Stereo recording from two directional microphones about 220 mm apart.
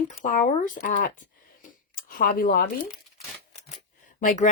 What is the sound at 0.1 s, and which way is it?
Speech, 35° left (ahead or behind).